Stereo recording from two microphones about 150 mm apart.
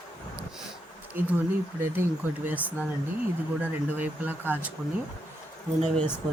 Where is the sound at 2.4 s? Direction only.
10° right (ahead or behind).